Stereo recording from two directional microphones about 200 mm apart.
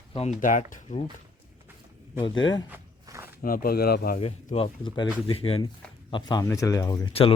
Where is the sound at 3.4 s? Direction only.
45° left (ahead or behind).